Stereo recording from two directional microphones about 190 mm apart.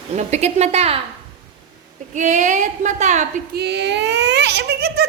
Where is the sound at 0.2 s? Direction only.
35° right (ahead or behind).